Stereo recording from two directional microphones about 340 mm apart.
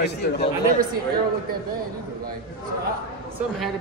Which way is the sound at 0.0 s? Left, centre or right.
Left.